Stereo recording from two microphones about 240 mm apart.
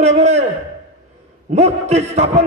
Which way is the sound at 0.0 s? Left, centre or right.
Right.